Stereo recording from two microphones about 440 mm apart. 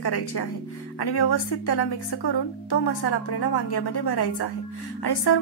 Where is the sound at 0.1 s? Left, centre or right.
Left.